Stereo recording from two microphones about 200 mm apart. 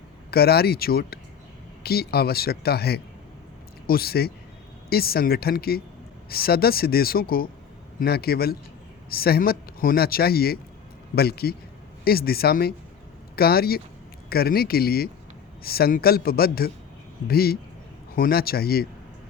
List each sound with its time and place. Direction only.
0.3 s speech: 50° left (ahead or behind)